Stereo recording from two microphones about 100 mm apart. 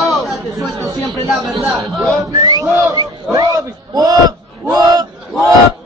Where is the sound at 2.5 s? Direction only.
40° right (ahead or behind).